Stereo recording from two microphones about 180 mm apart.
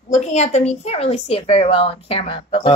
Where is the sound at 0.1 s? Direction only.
40° left (ahead or behind).